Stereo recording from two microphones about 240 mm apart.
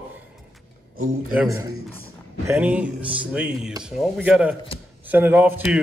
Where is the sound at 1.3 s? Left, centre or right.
Centre.